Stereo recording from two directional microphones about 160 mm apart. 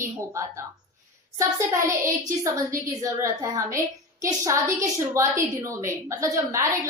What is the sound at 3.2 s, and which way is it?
A woman's voice, 20° right (ahead or behind).